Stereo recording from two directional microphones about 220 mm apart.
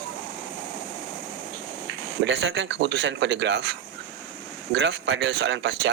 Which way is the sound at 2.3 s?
55° right (ahead or behind).